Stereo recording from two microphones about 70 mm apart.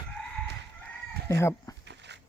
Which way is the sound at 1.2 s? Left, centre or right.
Left.